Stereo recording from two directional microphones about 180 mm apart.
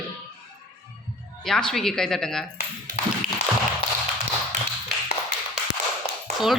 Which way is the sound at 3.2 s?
50° right (ahead or behind).